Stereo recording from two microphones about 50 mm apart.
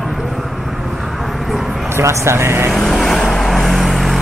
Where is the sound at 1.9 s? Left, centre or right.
Right.